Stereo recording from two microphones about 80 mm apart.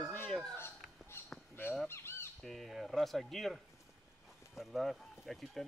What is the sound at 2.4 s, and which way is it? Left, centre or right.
Speech, centre.